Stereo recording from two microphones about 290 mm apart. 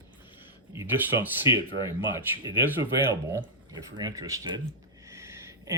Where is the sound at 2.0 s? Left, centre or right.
Centre.